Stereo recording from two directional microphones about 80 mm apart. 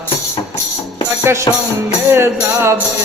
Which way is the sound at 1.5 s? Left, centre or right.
Left.